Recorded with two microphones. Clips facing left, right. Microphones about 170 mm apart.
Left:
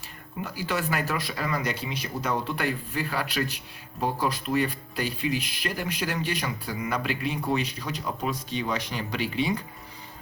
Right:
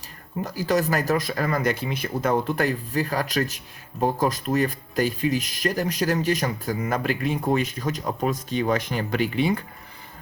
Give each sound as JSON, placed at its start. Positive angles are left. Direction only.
{"t": 0.4, "sound": "speech", "side_deg": -40}